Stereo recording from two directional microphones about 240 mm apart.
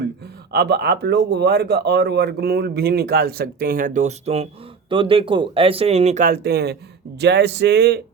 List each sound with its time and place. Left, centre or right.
0.5 s speech: right